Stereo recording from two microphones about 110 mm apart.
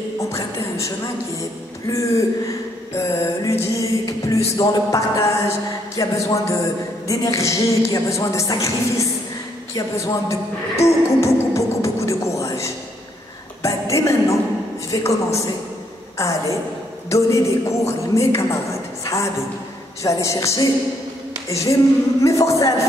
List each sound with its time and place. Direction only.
0.3 s a woman's voice: 25° left (ahead or behind)
3.6 s music: 30° left (ahead or behind)
4.6 s a woman's voice: 30° left (ahead or behind)
20.0 s a woman's voice: 30° left (ahead or behind)